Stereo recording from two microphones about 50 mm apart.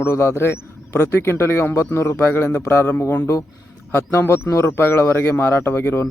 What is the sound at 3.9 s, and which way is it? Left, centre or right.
Speech, left.